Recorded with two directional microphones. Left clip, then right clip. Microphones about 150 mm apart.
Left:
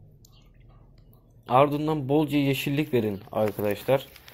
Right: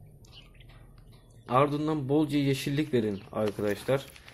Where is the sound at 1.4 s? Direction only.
15° left (ahead or behind).